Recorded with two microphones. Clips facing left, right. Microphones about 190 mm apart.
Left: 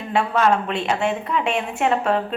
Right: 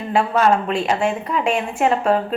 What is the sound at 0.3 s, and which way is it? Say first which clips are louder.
A woman's voice: right 2 dB; 5° right (ahead or behind).